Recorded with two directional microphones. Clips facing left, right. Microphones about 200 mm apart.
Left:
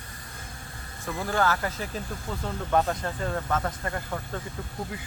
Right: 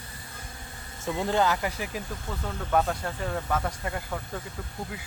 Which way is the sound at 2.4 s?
Centre (ahead or behind).